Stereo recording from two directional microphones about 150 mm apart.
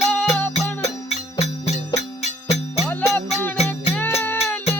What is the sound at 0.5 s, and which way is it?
Music, 45° left (ahead or behind).